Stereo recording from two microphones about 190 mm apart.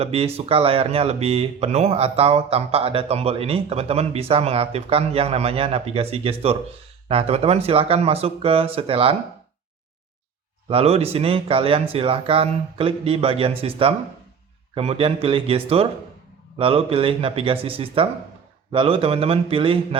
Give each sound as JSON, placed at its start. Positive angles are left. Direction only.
{"t": 0.0, "sound": "speech", "side_deg": -30}
{"t": 10.7, "sound": "speech", "side_deg": -30}